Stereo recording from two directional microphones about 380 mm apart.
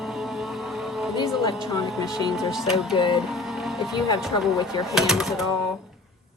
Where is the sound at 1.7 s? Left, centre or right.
Centre.